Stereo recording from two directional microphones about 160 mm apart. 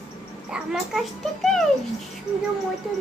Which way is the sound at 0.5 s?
Centre (ahead or behind).